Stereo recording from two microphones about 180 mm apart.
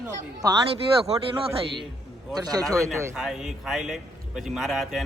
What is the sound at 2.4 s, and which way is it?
Speech, 20° right (ahead or behind).